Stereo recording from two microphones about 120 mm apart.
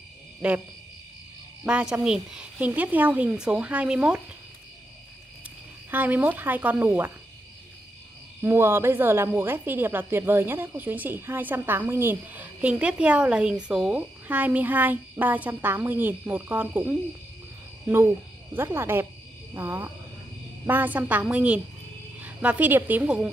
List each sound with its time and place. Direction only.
0.4 s a woman's voice: 10° right (ahead or behind)
1.6 s a woman's voice: 5° right (ahead or behind)
5.9 s a woman's voice: 15° right (ahead or behind)
8.4 s a woman's voice: 20° right (ahead or behind)
17.8 s hoot: 15° right (ahead or behind)
19.5 s a woman's voice: 20° right (ahead or behind)